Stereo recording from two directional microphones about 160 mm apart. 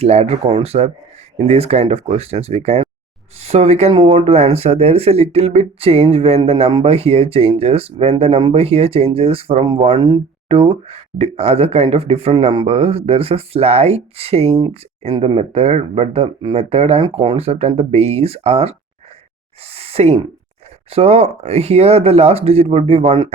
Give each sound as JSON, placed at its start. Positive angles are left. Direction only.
{"t": 0.0, "sound": "speech", "side_deg": -40}